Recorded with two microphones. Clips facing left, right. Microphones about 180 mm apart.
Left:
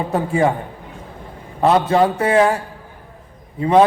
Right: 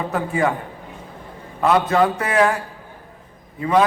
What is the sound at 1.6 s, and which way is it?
Speech, 25° left (ahead or behind).